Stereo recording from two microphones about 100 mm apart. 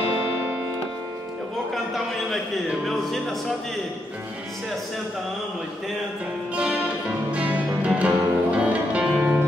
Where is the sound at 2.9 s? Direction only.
Centre (ahead or behind).